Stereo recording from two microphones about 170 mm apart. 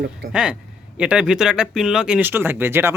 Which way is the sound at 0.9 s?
5° right (ahead or behind).